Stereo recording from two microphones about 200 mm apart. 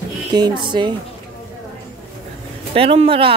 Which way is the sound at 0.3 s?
20° right (ahead or behind).